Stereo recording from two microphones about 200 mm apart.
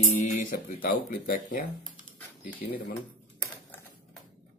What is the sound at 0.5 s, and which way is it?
Speech, 45° left (ahead or behind).